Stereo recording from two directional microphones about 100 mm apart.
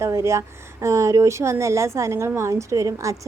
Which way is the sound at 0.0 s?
30° right (ahead or behind).